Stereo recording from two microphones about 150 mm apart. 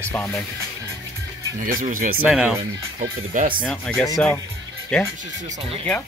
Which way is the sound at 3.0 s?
70° right (ahead or behind).